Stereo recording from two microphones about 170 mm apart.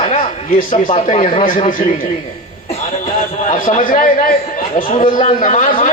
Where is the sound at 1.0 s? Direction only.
50° left (ahead or behind).